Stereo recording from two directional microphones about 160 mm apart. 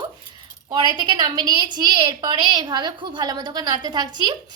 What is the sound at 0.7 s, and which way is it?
A woman's voice, 25° right (ahead or behind).